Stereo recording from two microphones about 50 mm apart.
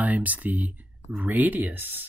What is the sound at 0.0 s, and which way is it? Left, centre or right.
Speech, right.